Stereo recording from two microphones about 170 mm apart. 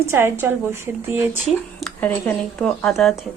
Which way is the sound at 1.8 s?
5° left (ahead or behind).